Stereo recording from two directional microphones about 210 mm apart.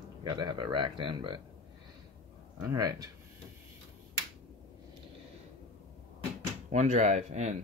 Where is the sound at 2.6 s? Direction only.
15° right (ahead or behind).